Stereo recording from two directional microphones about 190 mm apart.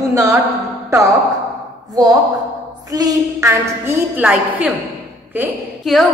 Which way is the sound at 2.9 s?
20° right (ahead or behind).